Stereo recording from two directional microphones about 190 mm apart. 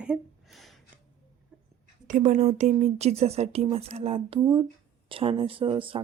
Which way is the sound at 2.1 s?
40° right (ahead or behind).